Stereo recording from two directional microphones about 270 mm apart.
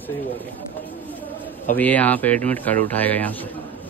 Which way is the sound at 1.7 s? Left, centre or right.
Centre.